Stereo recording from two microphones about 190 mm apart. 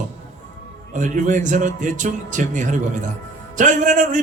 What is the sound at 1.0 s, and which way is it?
A man's voice, 40° right (ahead or behind).